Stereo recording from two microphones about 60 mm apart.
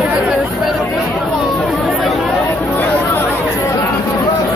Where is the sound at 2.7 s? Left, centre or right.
Left.